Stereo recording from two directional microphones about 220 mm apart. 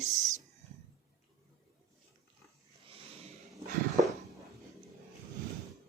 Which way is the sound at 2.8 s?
25° right (ahead or behind).